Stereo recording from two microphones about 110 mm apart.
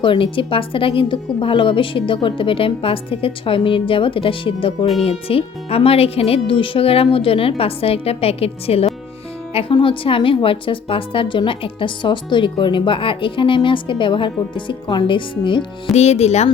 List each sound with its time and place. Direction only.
0.0 s a woman's voice: 50° left (ahead or behind)
15.9 s speech: 90° left